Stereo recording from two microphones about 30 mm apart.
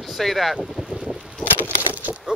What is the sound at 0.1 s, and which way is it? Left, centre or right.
Boat, centre.